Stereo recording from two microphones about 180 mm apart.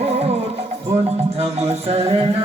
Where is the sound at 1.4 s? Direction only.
35° right (ahead or behind).